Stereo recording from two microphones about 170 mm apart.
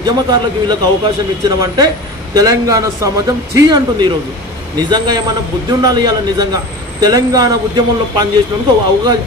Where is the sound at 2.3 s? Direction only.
20° right (ahead or behind).